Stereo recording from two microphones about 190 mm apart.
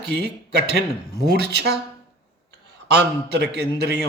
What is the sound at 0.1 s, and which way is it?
Speech, 60° right (ahead or behind).